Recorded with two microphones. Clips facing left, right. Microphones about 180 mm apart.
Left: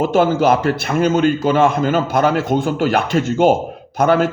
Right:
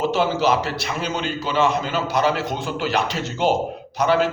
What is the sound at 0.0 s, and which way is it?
A man's voice, 50° left (ahead or behind).